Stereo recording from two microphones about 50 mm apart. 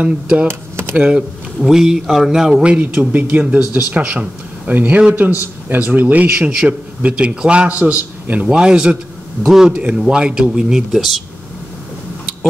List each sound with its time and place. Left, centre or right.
0.0 s a man's voice: right
0.5 s a sound: right
0.9 s speech: centre
2.6 s a man's voice: right
4.7 s a man's voice: right
6.3 s a man's voice: right
8.5 s speech: centre
9.4 s speech: centre
9.7 s speech: right
10.9 s speech: centre